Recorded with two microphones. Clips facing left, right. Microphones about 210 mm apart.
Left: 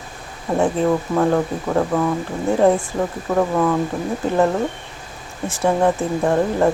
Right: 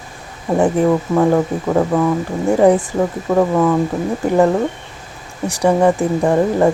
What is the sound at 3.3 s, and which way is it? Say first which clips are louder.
Speech: right 4 dB; 10° right (ahead or behind).